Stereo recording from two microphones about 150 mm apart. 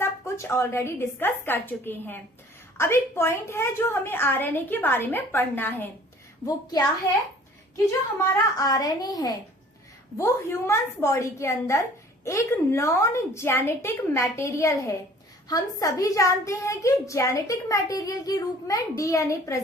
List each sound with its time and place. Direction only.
0.0 s a woman's voice: 15° left (ahead or behind)
6.4 s a woman's voice: 25° left (ahead or behind)
7.9 s a woman's voice: 20° left (ahead or behind)